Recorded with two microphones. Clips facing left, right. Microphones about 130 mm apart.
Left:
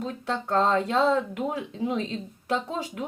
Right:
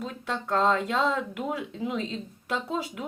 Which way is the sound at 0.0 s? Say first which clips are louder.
Left 3 dB; 35° left (ahead or behind).